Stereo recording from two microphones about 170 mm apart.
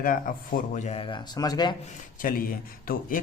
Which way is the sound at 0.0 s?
55° left (ahead or behind).